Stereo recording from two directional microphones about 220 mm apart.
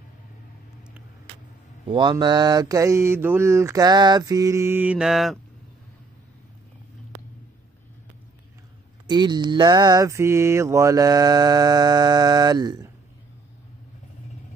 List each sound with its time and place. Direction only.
1.9 s mantra: 20° right (ahead or behind); by 5.4 s centre (ahead or behind)
9.0 s mantra: 20° right (ahead or behind)